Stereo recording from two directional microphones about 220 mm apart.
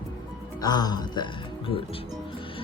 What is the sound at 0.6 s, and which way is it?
Speech, 20° left (ahead or behind).